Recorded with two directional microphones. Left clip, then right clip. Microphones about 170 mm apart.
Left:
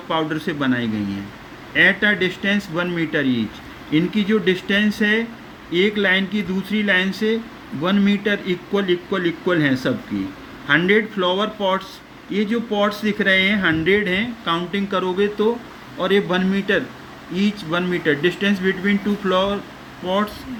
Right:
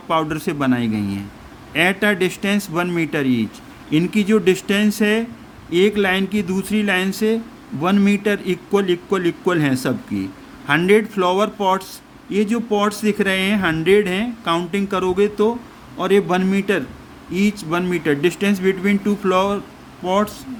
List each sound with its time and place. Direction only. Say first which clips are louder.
0.1 s speech: right 2 dB; 55° right (ahead or behind)